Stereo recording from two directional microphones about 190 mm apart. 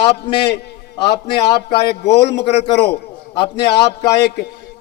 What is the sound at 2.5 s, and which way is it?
A man's voice, 30° left (ahead or behind).